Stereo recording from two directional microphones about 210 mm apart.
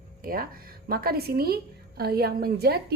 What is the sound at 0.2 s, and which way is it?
A woman's voice, 45° right (ahead or behind).